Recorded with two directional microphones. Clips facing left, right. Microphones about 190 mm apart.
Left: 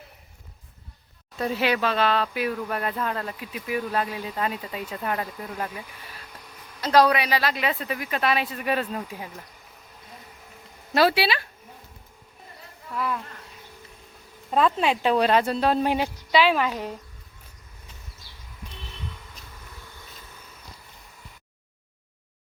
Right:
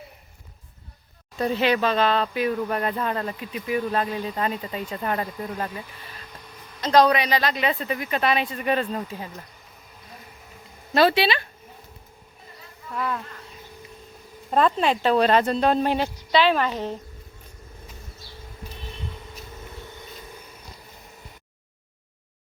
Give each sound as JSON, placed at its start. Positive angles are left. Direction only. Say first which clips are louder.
{"t": 1.4, "sound": "speech", "louder": "right 3 dB", "side_deg": 5}
{"t": 10.9, "sound": "a woman's voice", "louder": "right 2 dB", "side_deg": 10}
{"t": 14.5, "sound": "a woman's voice", "louder": "right 1 dB", "side_deg": 5}
{"t": 19.7, "sound": "a sound", "louder": "right 6 dB", "side_deg": -20}